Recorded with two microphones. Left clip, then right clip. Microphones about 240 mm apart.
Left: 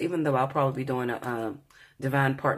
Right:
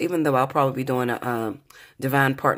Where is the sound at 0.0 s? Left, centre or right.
Right.